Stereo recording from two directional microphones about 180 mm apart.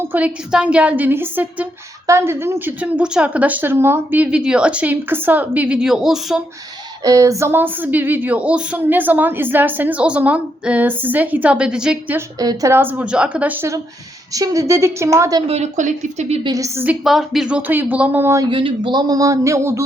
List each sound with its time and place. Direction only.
0.0 s speech: 10° right (ahead or behind)
7.0 s speech: 20° right (ahead or behind)
12.4 s speech: 20° right (ahead or behind)
15.4 s speech: 35° right (ahead or behind)
16.4 s speech: 20° right (ahead or behind)